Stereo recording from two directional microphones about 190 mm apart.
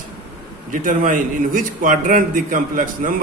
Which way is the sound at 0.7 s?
45° right (ahead or behind).